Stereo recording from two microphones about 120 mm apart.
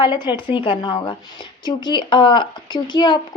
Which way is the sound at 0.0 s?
40° left (ahead or behind).